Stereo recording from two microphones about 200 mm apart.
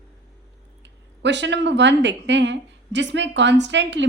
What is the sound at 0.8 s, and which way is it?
Speech, 60° right (ahead or behind).